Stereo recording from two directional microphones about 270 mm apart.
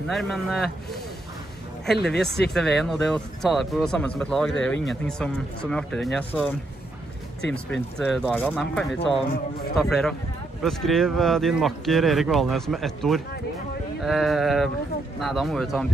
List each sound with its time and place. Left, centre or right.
0.1 s speech: centre
2.0 s speech: centre
7.5 s speech: centre